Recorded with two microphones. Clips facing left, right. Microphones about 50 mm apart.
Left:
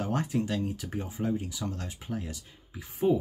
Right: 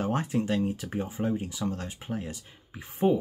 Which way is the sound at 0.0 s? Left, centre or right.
Right.